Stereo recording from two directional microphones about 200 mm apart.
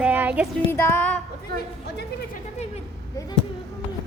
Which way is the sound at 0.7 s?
10° left (ahead or behind).